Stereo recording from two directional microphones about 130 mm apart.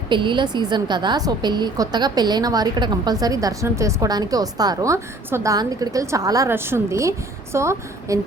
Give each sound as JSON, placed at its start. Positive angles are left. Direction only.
{"t": 0.1, "sound": "a woman's voice", "side_deg": -40}